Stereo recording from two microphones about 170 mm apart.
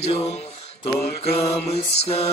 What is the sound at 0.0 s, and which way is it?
Mantra, 40° left (ahead or behind).